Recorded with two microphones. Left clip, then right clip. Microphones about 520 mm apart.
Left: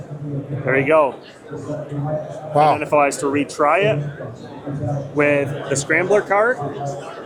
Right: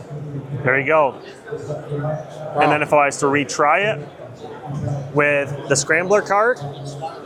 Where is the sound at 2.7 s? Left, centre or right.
Right.